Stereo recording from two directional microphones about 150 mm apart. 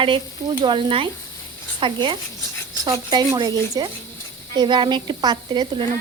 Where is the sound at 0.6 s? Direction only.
30° right (ahead or behind).